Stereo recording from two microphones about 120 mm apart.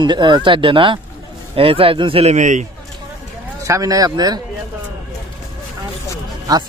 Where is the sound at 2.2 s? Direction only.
85° right.